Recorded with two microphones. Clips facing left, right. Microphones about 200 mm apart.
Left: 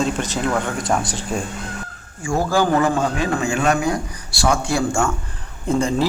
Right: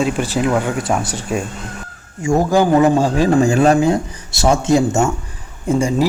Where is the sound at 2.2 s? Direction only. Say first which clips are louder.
Right 5 dB; 20° right (ahead or behind).